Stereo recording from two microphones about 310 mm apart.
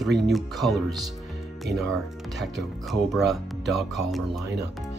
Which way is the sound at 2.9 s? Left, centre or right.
Centre.